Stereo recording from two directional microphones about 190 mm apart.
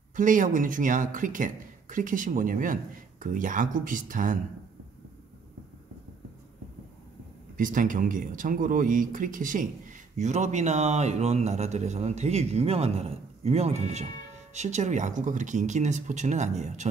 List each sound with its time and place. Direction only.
0.1 s speech: 45° right (ahead or behind)
7.5 s a man's voice: 45° right (ahead or behind)